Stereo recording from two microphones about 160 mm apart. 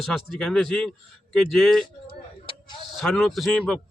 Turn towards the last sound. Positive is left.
turn(degrees=5)  # may be behind; listen again after turning